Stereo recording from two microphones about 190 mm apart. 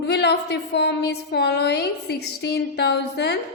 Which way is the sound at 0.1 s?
60° left (ahead or behind).